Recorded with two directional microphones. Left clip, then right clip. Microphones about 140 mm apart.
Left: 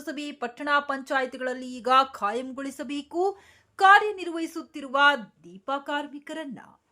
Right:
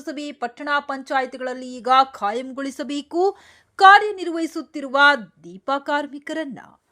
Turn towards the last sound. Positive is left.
turn(degrees=-35)  # may be behind; listen again after turning